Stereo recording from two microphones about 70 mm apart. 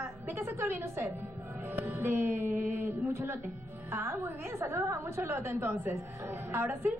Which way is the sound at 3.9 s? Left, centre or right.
Right.